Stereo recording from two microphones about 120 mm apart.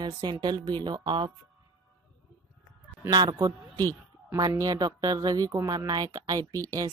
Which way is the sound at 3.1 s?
35° right (ahead or behind).